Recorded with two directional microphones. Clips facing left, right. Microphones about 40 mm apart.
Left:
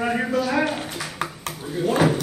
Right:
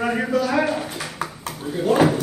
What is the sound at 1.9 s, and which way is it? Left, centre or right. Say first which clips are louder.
Speech: right 3 dB; centre.